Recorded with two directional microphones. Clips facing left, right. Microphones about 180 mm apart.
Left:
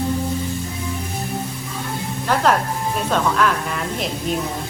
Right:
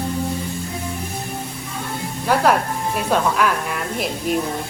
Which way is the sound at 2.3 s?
10° right (ahead or behind).